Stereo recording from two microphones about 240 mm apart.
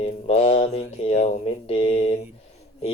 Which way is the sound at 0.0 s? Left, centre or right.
Left.